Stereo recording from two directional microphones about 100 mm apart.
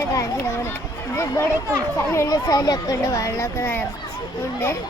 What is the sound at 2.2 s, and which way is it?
Speech, 40° left (ahead or behind).